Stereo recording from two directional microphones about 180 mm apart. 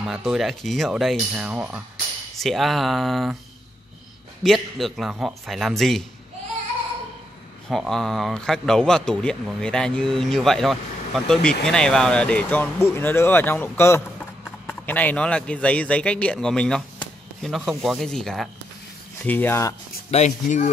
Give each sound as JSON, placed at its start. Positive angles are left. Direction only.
{"t": 0.0, "sound": "a man's voice", "side_deg": 0}
{"t": 4.4, "sound": "a man's voice", "side_deg": 0}
{"t": 7.7, "sound": "a man's voice", "side_deg": 0}
{"t": 20.1, "sound": "speech", "side_deg": 40}